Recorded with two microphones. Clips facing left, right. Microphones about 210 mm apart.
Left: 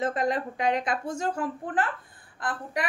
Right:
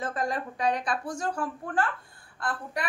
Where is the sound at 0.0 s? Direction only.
20° left (ahead or behind).